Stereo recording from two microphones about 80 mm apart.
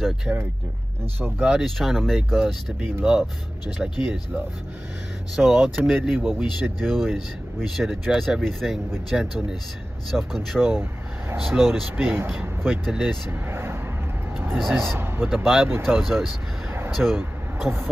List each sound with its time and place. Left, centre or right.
0.3 s speech: centre
5.3 s speech: centre
10.7 s speech: right
11.4 s speech: centre
12.1 s speech: right
13.3 s vehicle: right
14.3 s speech: right
14.6 s speech: centre
15.0 s a sound: right
15.2 s speech: centre